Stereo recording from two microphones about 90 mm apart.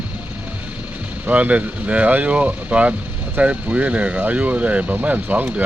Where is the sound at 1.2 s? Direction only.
15° right (ahead or behind).